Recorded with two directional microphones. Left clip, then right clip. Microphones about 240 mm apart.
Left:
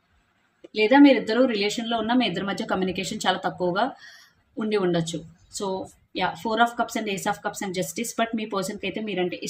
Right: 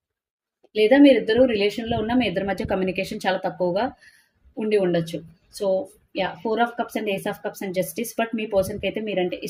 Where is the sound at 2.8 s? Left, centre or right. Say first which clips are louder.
Right 1 dB; left.